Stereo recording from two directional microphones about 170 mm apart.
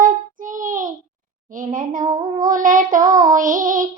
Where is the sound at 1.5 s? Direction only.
50° right (ahead or behind).